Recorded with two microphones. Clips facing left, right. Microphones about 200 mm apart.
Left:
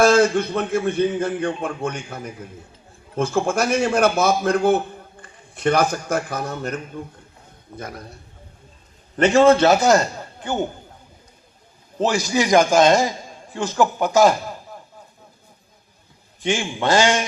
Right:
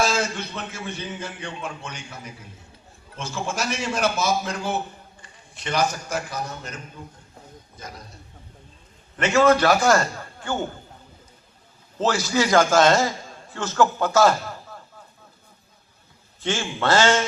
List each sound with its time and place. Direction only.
0.0 s a man's voice: 55° left (ahead or behind)
9.1 s a man's voice: 35° left (ahead or behind)
11.9 s a man's voice: 15° left (ahead or behind)
16.4 s a man's voice: 15° left (ahead or behind)